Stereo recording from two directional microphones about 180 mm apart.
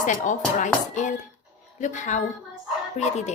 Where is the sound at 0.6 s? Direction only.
45° left (ahead or behind).